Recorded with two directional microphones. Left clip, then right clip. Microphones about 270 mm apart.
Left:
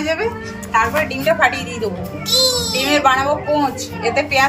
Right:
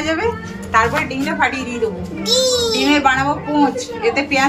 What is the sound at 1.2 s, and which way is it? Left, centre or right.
A woman's voice, centre.